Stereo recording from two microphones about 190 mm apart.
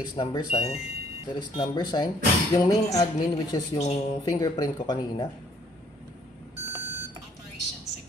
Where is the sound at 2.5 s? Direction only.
20° left (ahead or behind).